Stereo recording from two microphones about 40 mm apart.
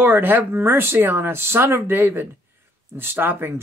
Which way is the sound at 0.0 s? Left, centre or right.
Right.